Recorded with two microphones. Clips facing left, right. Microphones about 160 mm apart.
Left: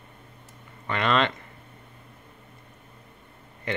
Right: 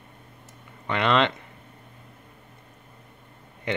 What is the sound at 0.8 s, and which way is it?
Speech, 15° right (ahead or behind).